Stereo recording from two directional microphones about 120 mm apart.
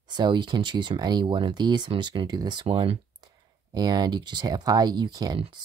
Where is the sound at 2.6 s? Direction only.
50° right (ahead or behind).